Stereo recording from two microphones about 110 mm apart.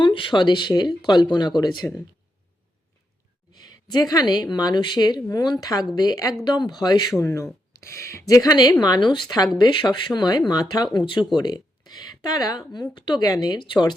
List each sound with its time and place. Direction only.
0.0 s speech: 50° left (ahead or behind)
3.5 s a sound: 40° left (ahead or behind)
4.5 s speech: 40° left (ahead or behind)
7.2 s speech: 25° left (ahead or behind)
10.9 s speech: 45° left (ahead or behind)